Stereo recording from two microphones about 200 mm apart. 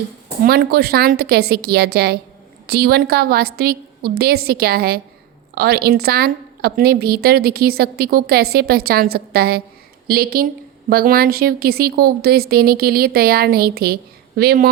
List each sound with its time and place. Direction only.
0.4 s speech: 50° right (ahead or behind)